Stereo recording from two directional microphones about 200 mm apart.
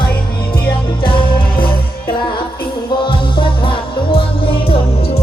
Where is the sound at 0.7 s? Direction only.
25° left (ahead or behind).